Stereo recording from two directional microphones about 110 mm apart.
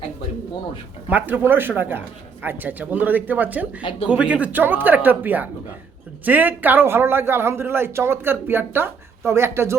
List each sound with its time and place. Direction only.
1.0 s a man's voice: 15° right (ahead or behind)